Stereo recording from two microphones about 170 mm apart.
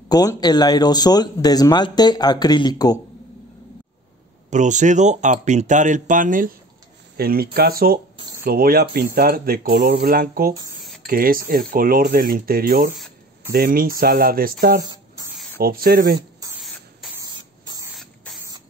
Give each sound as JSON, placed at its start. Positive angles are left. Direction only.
{"t": 0.1, "sound": "speech", "side_deg": 20}
{"t": 4.5, "sound": "speech", "side_deg": -45}
{"t": 10.8, "sound": "a sound", "side_deg": 0}
{"t": 11.1, "sound": "speech", "side_deg": -60}
{"t": 16.2, "sound": "a sound", "side_deg": -20}
{"t": 17.2, "sound": "spray", "side_deg": -25}
{"t": 17.9, "sound": "spray", "side_deg": 0}